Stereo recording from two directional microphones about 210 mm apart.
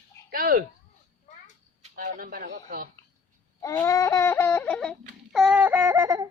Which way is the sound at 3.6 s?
15° left (ahead or behind).